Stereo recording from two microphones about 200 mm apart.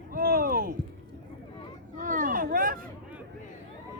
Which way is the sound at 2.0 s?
40° right (ahead or behind).